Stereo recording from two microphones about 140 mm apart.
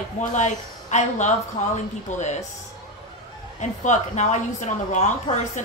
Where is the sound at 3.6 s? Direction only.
60° left (ahead or behind).